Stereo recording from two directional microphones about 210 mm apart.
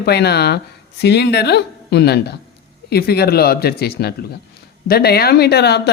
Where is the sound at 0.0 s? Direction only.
50° left (ahead or behind).